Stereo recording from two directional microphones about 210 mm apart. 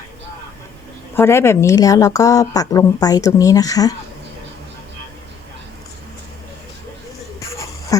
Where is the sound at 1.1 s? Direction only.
10° left (ahead or behind).